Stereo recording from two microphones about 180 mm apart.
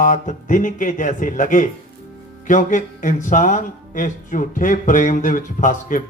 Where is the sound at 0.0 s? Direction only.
45° left (ahead or behind).